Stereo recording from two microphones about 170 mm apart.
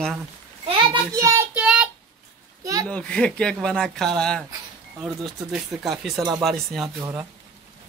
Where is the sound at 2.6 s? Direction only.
20° right (ahead or behind).